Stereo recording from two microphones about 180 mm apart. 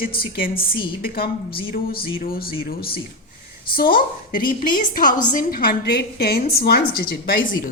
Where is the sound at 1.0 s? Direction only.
55° left (ahead or behind).